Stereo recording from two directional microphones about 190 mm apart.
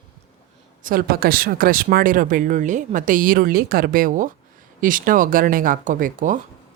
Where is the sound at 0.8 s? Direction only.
50° right (ahead or behind).